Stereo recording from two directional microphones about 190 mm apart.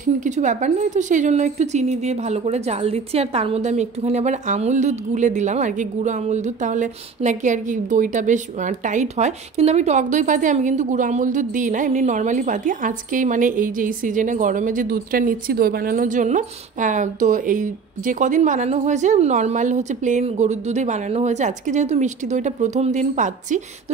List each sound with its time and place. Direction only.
0.0 s a woman's voice: 40° right (ahead or behind)